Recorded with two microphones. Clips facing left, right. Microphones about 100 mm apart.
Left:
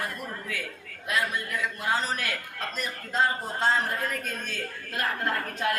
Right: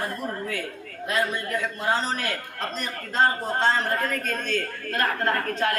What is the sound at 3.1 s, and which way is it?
A man's voice, 60° right (ahead or behind).